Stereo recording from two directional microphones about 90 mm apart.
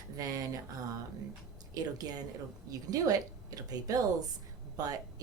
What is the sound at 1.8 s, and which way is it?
Speech, 45° right (ahead or behind).